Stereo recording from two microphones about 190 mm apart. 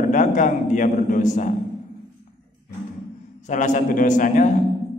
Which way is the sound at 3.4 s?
40° left (ahead or behind).